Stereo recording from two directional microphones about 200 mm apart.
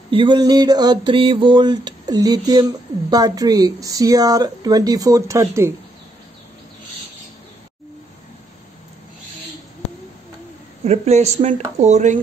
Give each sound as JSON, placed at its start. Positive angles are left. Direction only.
{"t": 0.1, "sound": "speech", "side_deg": -25}
{"t": 10.9, "sound": "speech", "side_deg": -35}